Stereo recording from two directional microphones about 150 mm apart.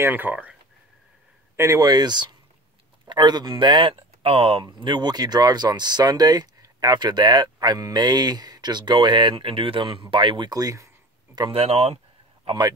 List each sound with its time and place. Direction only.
0.0 s speech: 15° right (ahead or behind)
1.6 s speech: 20° right (ahead or behind)
11.6 s speech: 45° right (ahead or behind)
12.4 s a man's voice: 30° right (ahead or behind)